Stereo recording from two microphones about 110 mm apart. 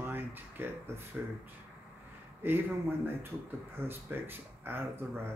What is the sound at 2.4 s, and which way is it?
Speech, 20° right (ahead or behind).